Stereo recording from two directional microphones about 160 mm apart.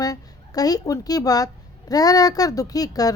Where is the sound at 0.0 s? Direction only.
25° left (ahead or behind).